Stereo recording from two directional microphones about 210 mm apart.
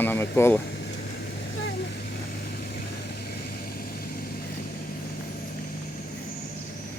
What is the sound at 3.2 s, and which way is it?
Vehicle, 45° left (ahead or behind).